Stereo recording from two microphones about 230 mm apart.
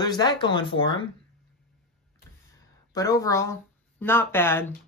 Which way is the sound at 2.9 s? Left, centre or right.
Centre.